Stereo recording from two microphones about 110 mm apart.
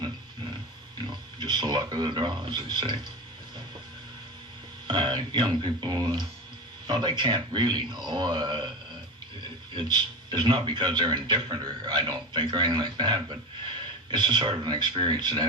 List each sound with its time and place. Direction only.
1.0 s speech: 45° right (ahead or behind)
4.9 s a man's voice: 45° right (ahead or behind)
9.7 s a man's voice: 45° right (ahead or behind)